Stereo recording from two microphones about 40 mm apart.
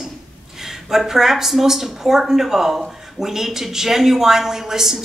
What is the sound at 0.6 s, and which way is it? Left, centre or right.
Speech, centre.